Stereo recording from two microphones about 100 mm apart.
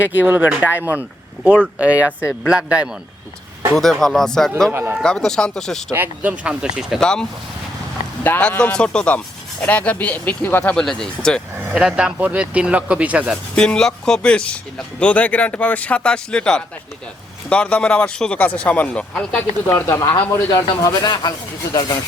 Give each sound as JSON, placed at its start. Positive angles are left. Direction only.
{"t": 0.0, "sound": "speech", "side_deg": -20}
{"t": 3.8, "sound": "speech", "side_deg": 5}
{"t": 4.7, "sound": "speech", "side_deg": -25}
{"t": 4.9, "sound": "speech", "side_deg": 5}
{"t": 5.9, "sound": "speech", "side_deg": -20}
{"t": 7.0, "sound": "speech", "side_deg": 5}
{"t": 11.7, "sound": "speech", "side_deg": -5}
{"t": 13.6, "sound": "speech", "side_deg": 5}
{"t": 19.6, "sound": "speech", "side_deg": 35}